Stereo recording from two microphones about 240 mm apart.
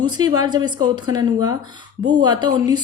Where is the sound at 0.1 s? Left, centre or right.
Centre.